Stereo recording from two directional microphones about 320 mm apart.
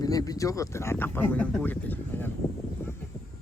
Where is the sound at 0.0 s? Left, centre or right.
Centre.